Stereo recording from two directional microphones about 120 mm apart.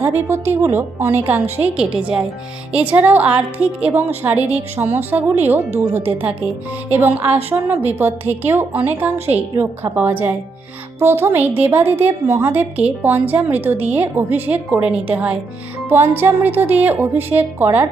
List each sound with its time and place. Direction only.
0.0 s a woman's voice: 20° right (ahead or behind)
6.9 s a woman's voice: 15° right (ahead or behind)